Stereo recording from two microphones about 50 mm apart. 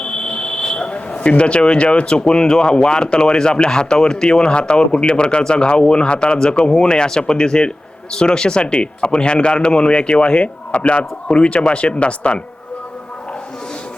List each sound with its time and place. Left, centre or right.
0.0 s speech: centre